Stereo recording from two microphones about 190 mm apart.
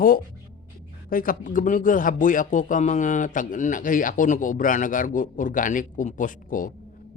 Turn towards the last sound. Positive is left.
turn(degrees=45)  # may be behind; listen again after turning